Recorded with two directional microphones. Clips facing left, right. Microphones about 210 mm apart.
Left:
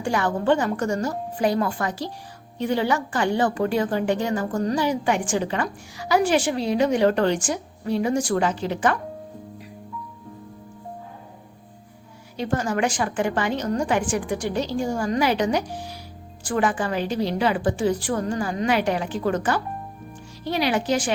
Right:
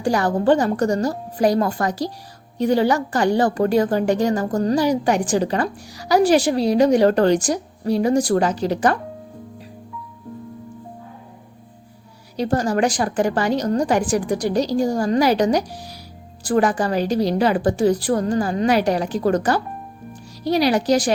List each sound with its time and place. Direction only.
0.0 s a woman's voice: 35° right (ahead or behind)
12.4 s a woman's voice: 35° right (ahead or behind)